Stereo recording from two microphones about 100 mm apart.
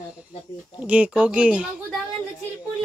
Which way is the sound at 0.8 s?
15° right (ahead or behind).